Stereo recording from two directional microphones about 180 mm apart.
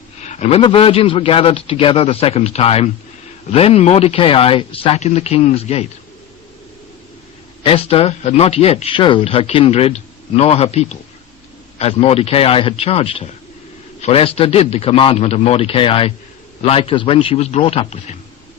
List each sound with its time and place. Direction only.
0.2 s speech: 40° left (ahead or behind)
7.6 s speech: 30° left (ahead or behind)